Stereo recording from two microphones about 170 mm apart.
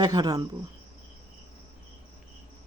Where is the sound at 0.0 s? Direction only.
25° right (ahead or behind).